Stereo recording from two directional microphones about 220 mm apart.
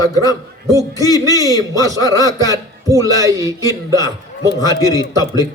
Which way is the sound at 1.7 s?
15° right (ahead or behind).